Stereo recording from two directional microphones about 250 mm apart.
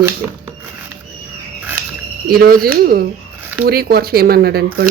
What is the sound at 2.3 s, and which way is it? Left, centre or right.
Speech, right.